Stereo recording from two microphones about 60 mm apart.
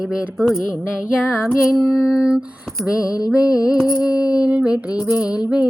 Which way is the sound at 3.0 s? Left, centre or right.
Left.